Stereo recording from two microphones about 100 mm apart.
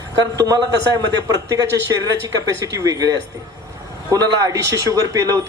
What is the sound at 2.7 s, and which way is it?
Speech, 35° right (ahead or behind).